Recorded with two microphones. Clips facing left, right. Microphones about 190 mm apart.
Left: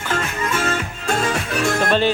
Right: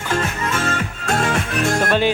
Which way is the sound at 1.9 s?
10° right (ahead or behind).